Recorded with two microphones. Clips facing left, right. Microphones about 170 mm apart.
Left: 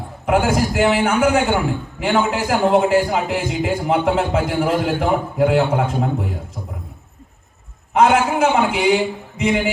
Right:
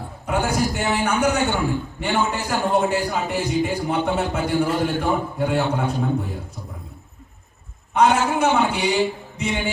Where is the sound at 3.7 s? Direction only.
55° left (ahead or behind).